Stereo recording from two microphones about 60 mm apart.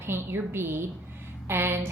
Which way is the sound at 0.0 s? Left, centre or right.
Right.